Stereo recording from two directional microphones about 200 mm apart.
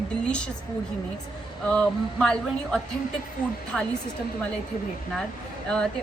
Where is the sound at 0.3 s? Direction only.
5° left (ahead or behind).